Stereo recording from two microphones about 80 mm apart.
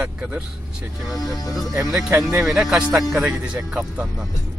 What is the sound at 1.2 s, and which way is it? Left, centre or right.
Speech, left.